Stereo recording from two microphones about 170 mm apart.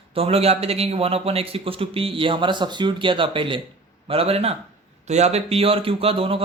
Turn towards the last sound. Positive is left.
turn(degrees=-35)  # may be behind; listen again after turning